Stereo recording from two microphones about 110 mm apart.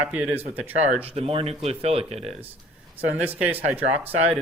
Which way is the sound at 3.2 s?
15° right (ahead or behind).